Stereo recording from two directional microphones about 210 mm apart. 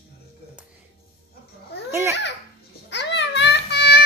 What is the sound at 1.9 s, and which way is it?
Speech, 10° right (ahead or behind).